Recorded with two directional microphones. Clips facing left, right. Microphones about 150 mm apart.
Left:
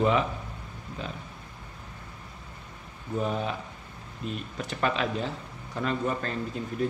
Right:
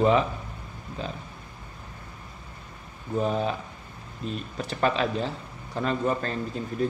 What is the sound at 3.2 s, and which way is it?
Speech, 35° right (ahead or behind).